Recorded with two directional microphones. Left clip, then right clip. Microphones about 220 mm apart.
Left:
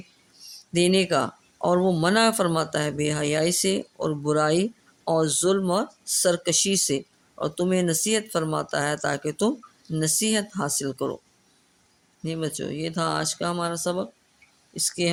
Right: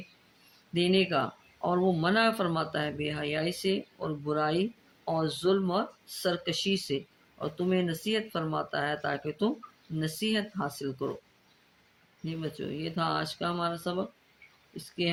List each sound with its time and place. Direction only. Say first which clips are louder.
0.7 s speech: left 5 dB; 55° left (ahead or behind)
12.2 s speech: left 7 dB; 55° left (ahead or behind)